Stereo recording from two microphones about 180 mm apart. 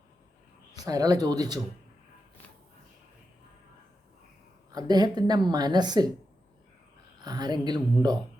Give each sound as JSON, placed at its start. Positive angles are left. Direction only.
{"t": 0.7, "sound": "speech", "side_deg": -20}
{"t": 4.7, "sound": "speech", "side_deg": -20}
{"t": 7.2, "sound": "speech", "side_deg": -25}